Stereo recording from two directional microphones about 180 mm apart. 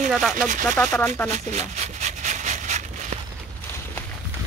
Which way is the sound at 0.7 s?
10° left (ahead or behind).